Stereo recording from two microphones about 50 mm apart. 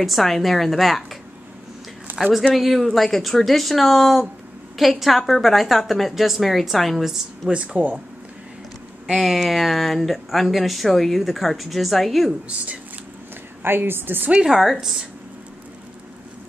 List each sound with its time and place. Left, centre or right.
0.0 s speech: centre
2.1 s a sound: right
2.5 s speech: centre
7.5 s speech: right
9.2 s speech: centre
13.6 s a woman's voice: right
14.3 s speech: centre
14.6 s speech: centre